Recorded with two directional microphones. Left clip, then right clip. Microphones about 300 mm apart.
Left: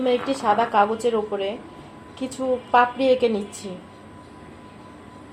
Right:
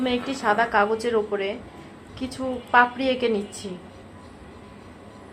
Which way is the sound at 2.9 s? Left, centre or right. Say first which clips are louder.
Left 5 dB; right.